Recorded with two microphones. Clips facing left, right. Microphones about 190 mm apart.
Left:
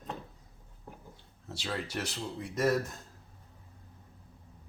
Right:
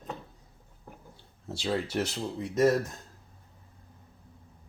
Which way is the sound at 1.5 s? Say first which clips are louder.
Right 6 dB; 25° right (ahead or behind).